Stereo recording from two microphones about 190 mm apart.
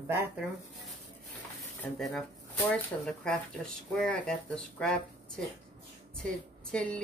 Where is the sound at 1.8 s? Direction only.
Centre (ahead or behind).